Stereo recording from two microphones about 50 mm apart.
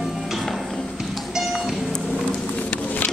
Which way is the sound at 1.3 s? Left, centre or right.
Centre.